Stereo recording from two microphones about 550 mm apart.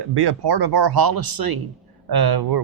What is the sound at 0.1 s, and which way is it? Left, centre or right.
Speech, right.